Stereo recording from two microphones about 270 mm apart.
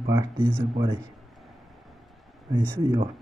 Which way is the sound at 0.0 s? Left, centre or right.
Centre.